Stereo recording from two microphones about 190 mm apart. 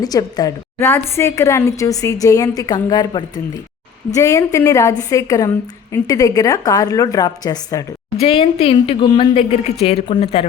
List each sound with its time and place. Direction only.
0.0 s a woman's voice: 20° left (ahead or behind)
8.2 s speech: 30° left (ahead or behind)